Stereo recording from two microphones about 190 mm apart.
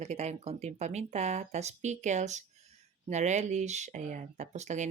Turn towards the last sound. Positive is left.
turn(degrees=-40)  # may be behind; listen again after turning